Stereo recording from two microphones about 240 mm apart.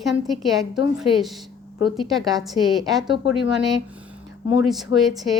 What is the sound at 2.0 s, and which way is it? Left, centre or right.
Speech, centre.